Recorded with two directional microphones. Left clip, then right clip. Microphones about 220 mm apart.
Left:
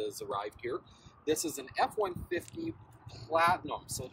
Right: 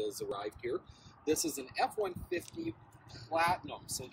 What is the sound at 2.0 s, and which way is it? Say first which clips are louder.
Speech: left 2 dB; 15° left (ahead or behind).